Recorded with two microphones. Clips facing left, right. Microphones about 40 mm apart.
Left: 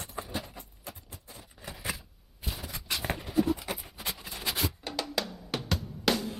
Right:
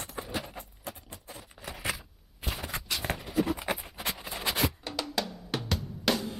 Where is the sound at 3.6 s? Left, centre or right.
Right.